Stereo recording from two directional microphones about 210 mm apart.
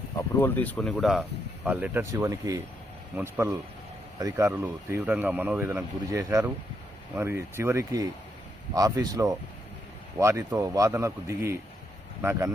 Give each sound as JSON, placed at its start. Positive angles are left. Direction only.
{"t": 0.2, "sound": "speech", "side_deg": 10}